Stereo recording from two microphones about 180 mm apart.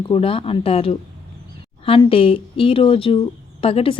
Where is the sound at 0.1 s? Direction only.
30° left (ahead or behind).